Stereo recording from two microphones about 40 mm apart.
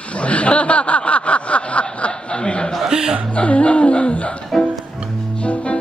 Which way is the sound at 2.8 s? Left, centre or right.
Centre.